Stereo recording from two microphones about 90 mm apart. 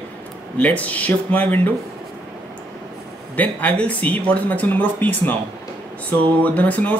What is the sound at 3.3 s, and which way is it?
Speech, 15° left (ahead or behind).